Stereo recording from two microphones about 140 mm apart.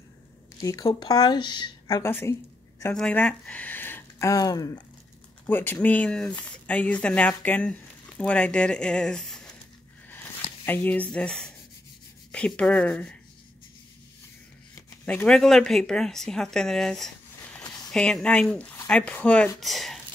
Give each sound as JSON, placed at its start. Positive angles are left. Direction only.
{"t": 0.6, "sound": "speech", "side_deg": 25}
{"t": 2.0, "sound": "speech", "side_deg": 15}
{"t": 5.5, "sound": "speech", "side_deg": 15}
{"t": 10.6, "sound": "speech", "side_deg": 10}
{"t": 15.0, "sound": "speech", "side_deg": 5}
{"t": 17.6, "sound": "a sound", "side_deg": 25}
{"t": 17.9, "sound": "speech", "side_deg": 5}